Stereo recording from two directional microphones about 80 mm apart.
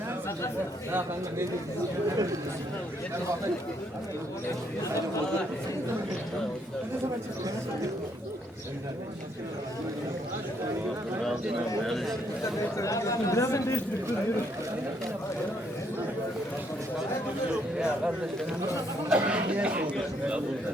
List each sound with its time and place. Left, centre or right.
0.9 s speech: right
11.8 s a man's voice: centre
12.7 s speech: left
17.5 s speech: centre